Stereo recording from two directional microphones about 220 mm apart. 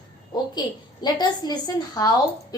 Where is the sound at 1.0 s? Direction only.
20° left (ahead or behind).